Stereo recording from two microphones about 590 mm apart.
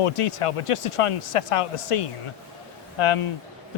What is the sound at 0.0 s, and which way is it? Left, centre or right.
Speech, left.